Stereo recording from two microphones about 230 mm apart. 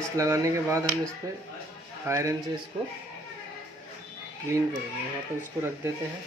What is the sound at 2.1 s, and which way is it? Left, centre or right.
Speech, centre.